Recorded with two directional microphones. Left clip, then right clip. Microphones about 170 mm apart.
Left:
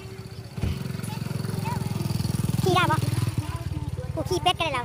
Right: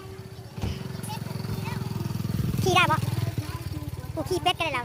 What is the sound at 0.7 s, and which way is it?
Vehicle, 45° left (ahead or behind).